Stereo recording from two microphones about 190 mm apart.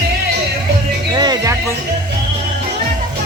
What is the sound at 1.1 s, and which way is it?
Speech, 20° right (ahead or behind).